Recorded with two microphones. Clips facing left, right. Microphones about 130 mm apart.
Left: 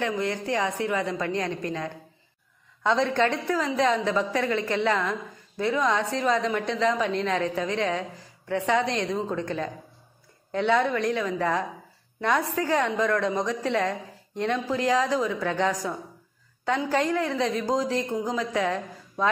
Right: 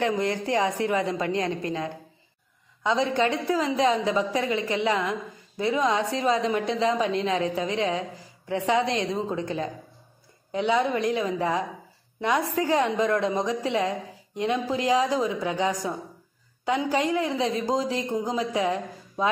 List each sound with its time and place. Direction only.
0.0 s a woman's voice: 30° right (ahead or behind)
2.8 s a woman's voice: 5° right (ahead or behind)
3.4 s a woman's voice: 20° right (ahead or behind)
10.5 s a woman's voice: 10° right (ahead or behind)